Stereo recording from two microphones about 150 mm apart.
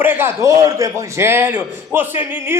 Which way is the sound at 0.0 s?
15° right (ahead or behind).